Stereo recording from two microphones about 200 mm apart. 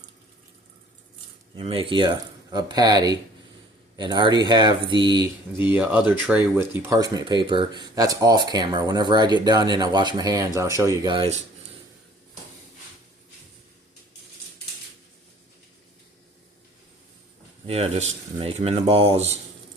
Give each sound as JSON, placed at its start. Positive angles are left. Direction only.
{"t": 1.5, "sound": "speech", "side_deg": -25}
{"t": 5.6, "sound": "speech", "side_deg": -5}
{"t": 17.7, "sound": "speech", "side_deg": -30}